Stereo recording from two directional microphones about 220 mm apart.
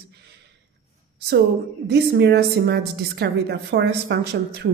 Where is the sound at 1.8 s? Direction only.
50° right (ahead or behind).